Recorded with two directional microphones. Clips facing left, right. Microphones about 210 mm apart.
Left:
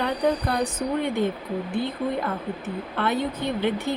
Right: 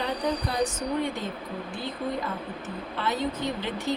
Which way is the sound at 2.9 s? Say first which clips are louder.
Left 3 dB; 60° left (ahead or behind).